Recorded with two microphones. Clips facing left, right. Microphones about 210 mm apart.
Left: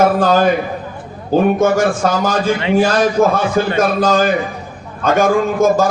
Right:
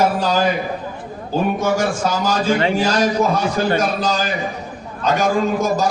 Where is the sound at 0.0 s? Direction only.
50° left (ahead or behind).